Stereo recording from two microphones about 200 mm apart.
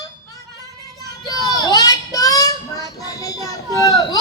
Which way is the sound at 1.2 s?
20° left (ahead or behind).